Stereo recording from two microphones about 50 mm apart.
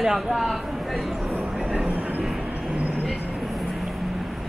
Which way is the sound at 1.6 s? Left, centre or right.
Right.